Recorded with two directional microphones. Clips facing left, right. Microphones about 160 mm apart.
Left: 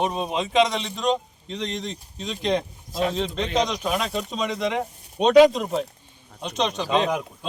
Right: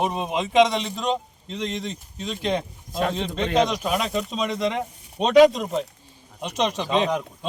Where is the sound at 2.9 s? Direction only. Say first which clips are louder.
Even; 50° right (ahead or behind).